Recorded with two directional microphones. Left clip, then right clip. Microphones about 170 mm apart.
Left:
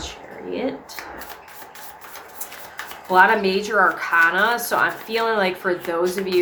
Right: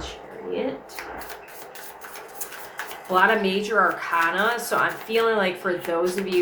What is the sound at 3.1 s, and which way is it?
Speech, 25° left (ahead or behind).